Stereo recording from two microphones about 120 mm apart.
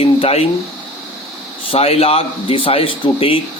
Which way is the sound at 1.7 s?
55° left (ahead or behind).